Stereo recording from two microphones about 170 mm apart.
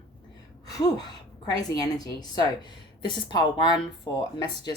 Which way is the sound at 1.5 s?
25° left (ahead or behind).